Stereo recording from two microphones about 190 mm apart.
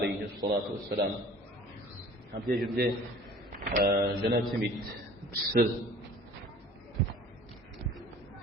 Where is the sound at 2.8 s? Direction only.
55° right (ahead or behind).